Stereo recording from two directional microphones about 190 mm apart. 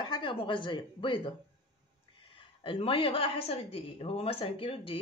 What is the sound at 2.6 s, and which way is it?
Speech, 30° left (ahead or behind).